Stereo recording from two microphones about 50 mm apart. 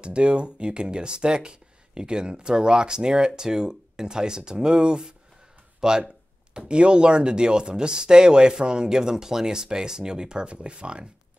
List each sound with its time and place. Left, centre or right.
0.0 s speech: right
5.8 s a sound: centre
6.7 s speech: centre